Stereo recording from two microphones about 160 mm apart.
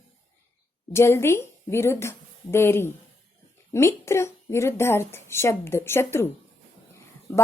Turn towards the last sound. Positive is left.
turn(degrees=20)  # may be behind; listen again after turning